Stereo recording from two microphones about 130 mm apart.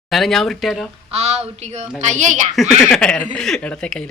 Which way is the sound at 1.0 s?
55° right (ahead or behind).